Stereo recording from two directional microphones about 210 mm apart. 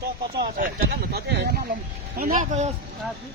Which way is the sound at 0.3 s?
45° right (ahead or behind).